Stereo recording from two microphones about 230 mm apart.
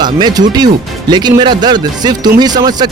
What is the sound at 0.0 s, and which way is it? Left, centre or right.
Speech, centre.